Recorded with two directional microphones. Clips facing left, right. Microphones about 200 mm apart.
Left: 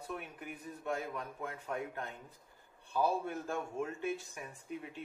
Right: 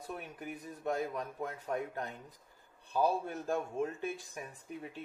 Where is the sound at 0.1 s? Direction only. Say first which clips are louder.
Right 2 dB; 40° right (ahead or behind).